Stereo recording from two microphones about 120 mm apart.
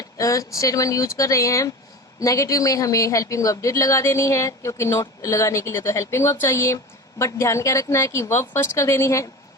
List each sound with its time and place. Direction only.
0.0 s a woman's voice: 25° left (ahead or behind)